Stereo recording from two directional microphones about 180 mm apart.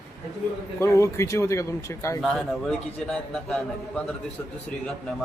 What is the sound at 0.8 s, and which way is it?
A man's voice, 15° left (ahead or behind).